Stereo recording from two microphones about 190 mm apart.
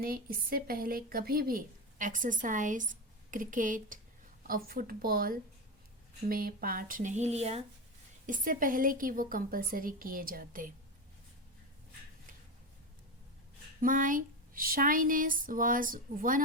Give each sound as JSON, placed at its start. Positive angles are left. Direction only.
{"t": 0.0, "sound": "a woman's voice", "side_deg": -50}
{"t": 8.3, "sound": "a woman's voice", "side_deg": -45}
{"t": 13.8, "sound": "a woman's voice", "side_deg": -45}